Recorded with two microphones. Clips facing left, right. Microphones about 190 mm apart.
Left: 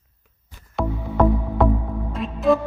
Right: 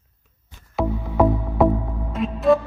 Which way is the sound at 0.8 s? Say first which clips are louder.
Right 1 dB; 5° right (ahead or behind).